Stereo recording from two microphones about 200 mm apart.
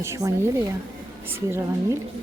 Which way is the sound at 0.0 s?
15° right (ahead or behind).